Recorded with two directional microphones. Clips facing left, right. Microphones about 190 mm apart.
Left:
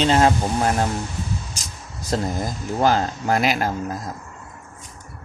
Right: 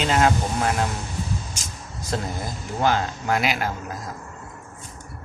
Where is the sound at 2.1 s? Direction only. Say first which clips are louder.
Left 5 dB; 40° left (ahead or behind).